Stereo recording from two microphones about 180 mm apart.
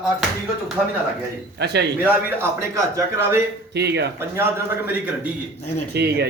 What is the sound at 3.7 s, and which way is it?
Speech, 70° right (ahead or behind).